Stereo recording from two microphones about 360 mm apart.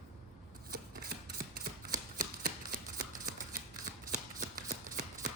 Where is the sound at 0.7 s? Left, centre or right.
Right.